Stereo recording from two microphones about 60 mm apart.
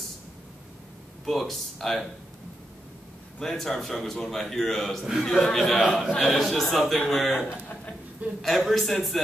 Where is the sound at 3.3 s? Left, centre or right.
Centre.